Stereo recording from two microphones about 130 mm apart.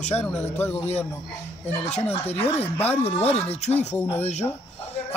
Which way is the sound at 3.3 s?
55° left (ahead or behind).